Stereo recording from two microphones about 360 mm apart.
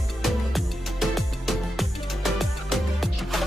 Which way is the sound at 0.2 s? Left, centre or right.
Centre.